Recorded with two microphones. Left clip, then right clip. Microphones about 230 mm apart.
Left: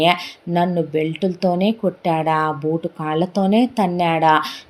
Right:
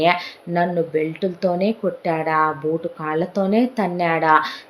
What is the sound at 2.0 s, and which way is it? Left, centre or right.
A woman's voice, left.